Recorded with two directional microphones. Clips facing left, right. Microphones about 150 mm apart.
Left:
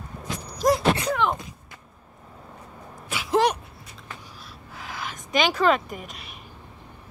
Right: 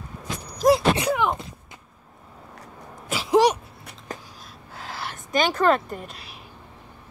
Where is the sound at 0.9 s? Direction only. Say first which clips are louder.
Right 2 dB; 10° right (ahead or behind).